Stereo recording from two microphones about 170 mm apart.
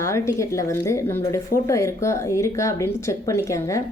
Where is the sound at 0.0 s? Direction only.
15° left (ahead or behind).